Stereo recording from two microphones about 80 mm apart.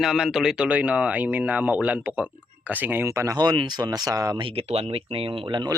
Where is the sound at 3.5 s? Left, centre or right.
Right.